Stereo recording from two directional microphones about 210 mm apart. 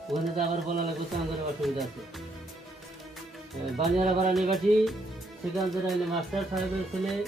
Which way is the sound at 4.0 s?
35° right (ahead or behind).